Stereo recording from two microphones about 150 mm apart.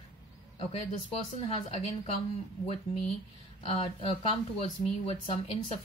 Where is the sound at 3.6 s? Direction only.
40° left (ahead or behind).